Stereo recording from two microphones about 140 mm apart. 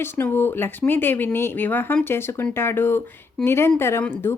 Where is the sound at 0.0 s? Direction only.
15° left (ahead or behind).